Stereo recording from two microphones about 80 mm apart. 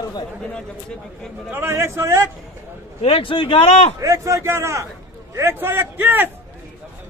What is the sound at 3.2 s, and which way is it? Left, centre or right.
Speech, left.